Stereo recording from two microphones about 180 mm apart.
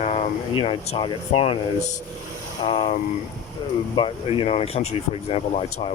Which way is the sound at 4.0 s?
30° left (ahead or behind).